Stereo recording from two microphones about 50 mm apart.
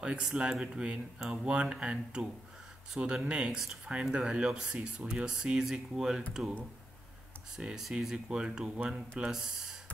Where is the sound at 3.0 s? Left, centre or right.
Right.